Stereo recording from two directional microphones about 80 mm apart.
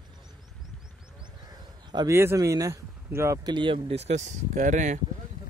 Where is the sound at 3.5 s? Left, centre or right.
Right.